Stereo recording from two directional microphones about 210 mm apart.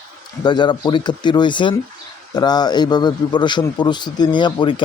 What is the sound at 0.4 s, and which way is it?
Speech, 20° left (ahead or behind).